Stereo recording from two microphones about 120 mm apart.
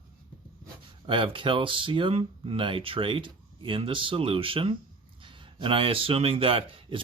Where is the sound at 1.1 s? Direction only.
45° right (ahead or behind).